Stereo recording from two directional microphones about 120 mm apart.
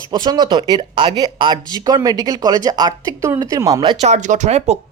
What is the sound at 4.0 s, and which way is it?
Speech, 80° right.